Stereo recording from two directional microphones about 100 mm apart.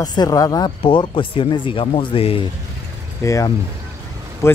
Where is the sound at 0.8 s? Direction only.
55° left (ahead or behind).